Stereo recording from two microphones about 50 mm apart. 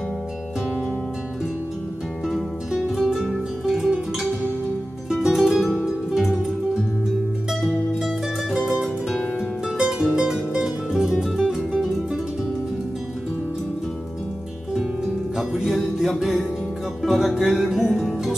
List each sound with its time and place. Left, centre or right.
2.7 s music: centre
7.6 s music: centre
9.8 s music: centre
15.3 s music: centre